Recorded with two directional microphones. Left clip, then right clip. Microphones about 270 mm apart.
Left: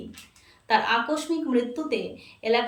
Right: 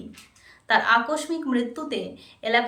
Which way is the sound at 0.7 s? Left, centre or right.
Centre.